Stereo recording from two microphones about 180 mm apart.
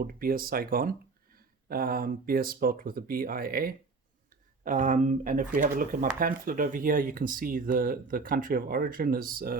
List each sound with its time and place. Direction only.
0.0 s speech: 55° right (ahead or behind)